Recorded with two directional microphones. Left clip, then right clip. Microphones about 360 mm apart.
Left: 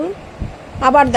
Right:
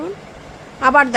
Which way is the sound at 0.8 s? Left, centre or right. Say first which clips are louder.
Left 2 dB; centre.